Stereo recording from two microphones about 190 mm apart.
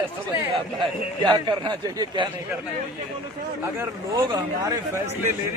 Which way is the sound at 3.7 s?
15° right (ahead or behind).